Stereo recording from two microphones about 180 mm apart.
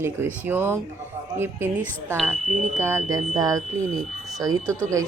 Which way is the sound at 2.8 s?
15° right (ahead or behind).